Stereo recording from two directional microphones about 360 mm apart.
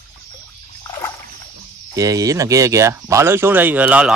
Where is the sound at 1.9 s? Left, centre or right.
Centre.